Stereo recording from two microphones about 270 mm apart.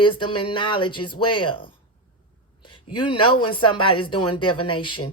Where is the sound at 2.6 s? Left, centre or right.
Centre.